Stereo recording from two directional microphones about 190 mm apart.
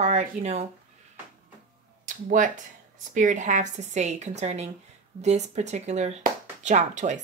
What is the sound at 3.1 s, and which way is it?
Speech, 40° right (ahead or behind).